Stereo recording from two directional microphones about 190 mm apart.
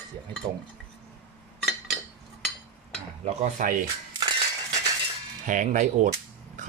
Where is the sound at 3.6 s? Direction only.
45° right (ahead or behind).